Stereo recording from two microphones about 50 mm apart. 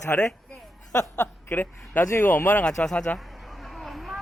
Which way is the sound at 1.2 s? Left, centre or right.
Left.